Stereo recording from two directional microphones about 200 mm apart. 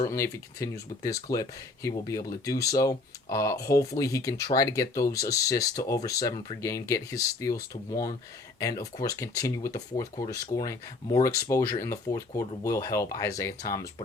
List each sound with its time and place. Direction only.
0.1 s speech: 15° left (ahead or behind)